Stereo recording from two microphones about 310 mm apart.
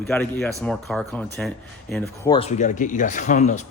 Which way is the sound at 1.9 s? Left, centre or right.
Centre.